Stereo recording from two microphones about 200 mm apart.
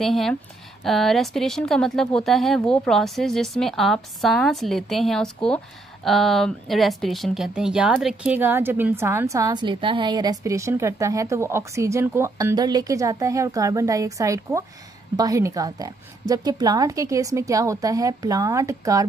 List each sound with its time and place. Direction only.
0.0 s speech: centre (ahead or behind); by 19.0 s 15° right (ahead or behind)